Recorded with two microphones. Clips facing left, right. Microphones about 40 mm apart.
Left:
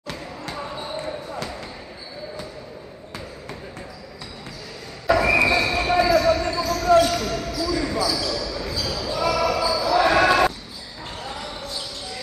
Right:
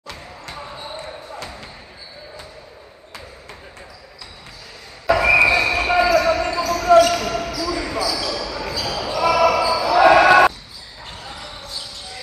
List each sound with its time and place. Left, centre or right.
0.1 s basketball bounce: centre
5.4 s basketball bounce: right
7.0 s basketball bounce: right
11.1 s basketball bounce: centre